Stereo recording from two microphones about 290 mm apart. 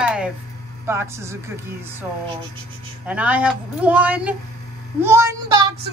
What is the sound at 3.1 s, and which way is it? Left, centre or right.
Speech, centre.